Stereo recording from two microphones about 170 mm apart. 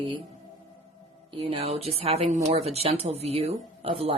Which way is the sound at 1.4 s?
35° right (ahead or behind).